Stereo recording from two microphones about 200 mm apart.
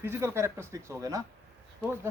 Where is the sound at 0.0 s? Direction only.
10° right (ahead or behind).